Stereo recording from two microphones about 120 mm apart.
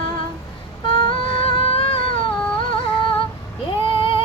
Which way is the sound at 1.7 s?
50° left (ahead or behind).